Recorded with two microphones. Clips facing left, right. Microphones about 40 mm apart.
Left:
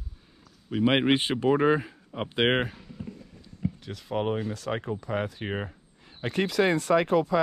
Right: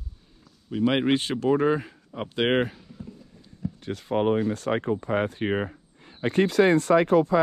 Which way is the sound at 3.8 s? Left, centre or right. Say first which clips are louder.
Right 7 dB; right.